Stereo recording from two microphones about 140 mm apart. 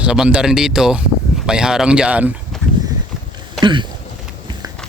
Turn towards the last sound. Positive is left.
turn(degrees=-35)  # may be behind; listen again after turning